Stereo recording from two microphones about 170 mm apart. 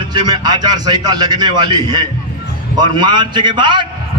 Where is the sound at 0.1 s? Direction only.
25° right (ahead or behind).